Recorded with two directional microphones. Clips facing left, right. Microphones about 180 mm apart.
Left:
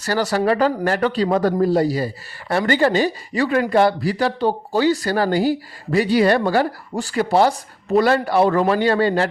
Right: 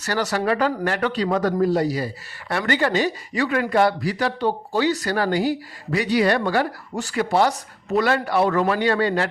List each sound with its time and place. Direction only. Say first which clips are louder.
0.0 s speech: left 4 dB; 30° left (ahead or behind)